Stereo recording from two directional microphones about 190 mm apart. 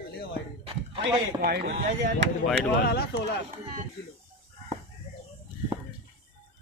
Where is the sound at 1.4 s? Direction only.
60° right (ahead or behind).